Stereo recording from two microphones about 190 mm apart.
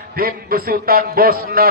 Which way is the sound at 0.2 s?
50° right (ahead or behind).